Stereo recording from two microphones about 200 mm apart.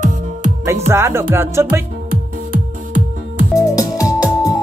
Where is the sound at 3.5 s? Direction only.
15° left (ahead or behind).